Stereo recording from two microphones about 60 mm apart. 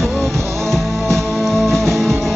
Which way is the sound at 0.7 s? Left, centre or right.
Centre.